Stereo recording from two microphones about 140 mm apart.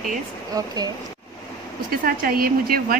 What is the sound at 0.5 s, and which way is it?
Speech, 30° right (ahead or behind).